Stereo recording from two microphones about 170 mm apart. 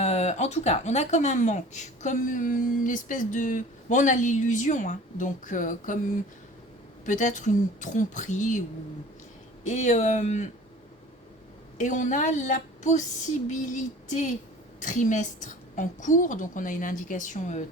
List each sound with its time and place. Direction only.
0.0 s speech: 40° left (ahead or behind)
7.0 s speech: 45° left (ahead or behind)
9.6 s speech: 45° left (ahead or behind)
11.8 s speech: 45° left (ahead or behind)